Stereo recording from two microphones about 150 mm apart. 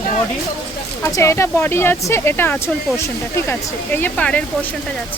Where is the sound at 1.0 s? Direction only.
20° left (ahead or behind).